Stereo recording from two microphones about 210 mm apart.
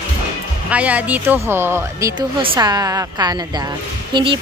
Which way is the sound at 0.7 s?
5° right (ahead or behind).